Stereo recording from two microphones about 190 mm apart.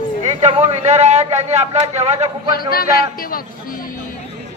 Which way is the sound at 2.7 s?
50° left (ahead or behind).